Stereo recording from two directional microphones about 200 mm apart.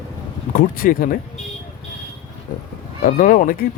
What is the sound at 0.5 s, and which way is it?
Speech, 45° left (ahead or behind).